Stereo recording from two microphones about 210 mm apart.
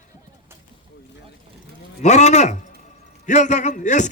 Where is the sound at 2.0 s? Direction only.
35° left (ahead or behind).